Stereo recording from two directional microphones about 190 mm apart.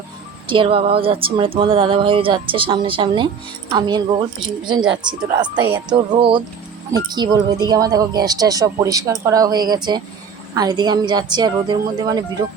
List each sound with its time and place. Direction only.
0.5 s speech: 25° right (ahead or behind)